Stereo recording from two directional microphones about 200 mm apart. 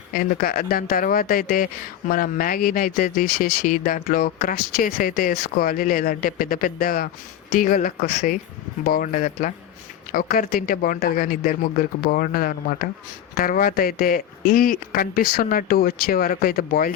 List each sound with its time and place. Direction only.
0.1 s speech: 45° left (ahead or behind)